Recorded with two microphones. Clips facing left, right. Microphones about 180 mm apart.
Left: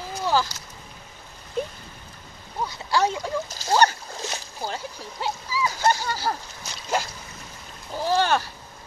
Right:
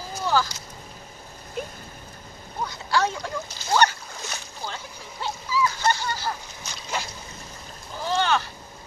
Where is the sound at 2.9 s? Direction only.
20° left (ahead or behind).